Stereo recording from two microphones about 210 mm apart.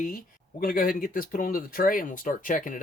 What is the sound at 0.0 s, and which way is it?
Speech, 40° left (ahead or behind).